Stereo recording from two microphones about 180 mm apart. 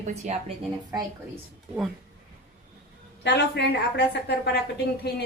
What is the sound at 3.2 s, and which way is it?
A woman's voice, 65° left (ahead or behind).